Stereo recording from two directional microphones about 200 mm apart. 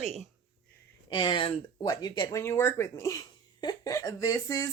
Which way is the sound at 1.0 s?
20° left (ahead or behind).